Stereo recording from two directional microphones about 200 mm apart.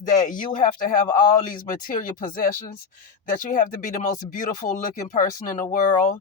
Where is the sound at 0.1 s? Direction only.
40° left (ahead or behind).